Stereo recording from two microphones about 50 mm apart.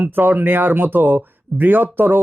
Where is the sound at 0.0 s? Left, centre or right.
Right.